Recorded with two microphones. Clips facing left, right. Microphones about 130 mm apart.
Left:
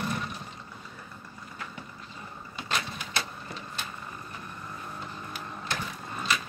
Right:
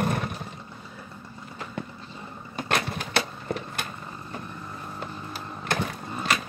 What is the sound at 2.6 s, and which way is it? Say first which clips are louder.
Vehicle: right 6 dB; 65° right (ahead or behind).